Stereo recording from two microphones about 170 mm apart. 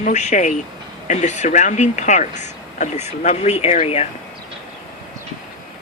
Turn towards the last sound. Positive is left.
turn(degrees=35)  # may be behind; listen again after turning